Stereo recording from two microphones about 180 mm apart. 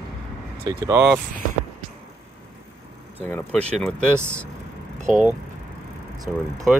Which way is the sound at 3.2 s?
10° left (ahead or behind).